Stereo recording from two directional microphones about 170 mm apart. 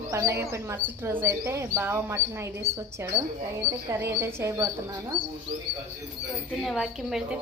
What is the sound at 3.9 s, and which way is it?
Speech, 15° right (ahead or behind).